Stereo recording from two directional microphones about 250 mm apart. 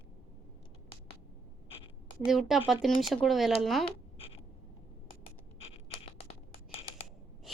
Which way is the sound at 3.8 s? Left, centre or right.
Left.